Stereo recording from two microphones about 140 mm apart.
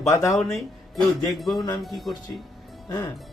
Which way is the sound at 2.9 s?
20° left (ahead or behind).